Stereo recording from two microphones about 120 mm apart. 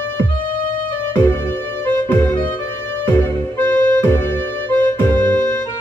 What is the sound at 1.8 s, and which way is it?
Music, 15° left (ahead or behind).